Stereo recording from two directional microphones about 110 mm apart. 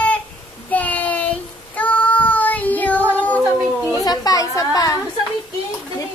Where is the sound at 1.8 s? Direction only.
15° left (ahead or behind).